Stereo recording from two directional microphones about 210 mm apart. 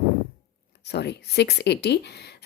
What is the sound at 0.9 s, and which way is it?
Speech, 50° left (ahead or behind).